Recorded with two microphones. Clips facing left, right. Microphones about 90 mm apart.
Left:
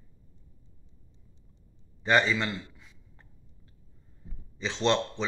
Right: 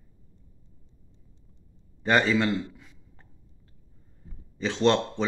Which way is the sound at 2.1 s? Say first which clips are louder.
Right 3 dB; 40° right (ahead or behind).